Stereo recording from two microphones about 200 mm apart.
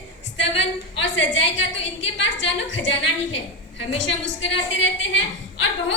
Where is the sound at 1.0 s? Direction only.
65° left (ahead or behind).